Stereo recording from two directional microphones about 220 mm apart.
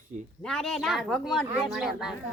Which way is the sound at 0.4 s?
Centre (ahead or behind).